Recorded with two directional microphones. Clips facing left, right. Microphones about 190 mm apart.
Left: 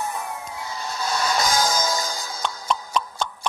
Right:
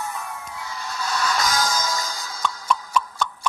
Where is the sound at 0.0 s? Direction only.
25° left (ahead or behind).